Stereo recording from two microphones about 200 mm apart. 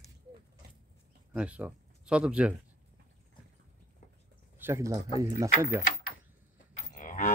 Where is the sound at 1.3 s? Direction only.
5° right (ahead or behind).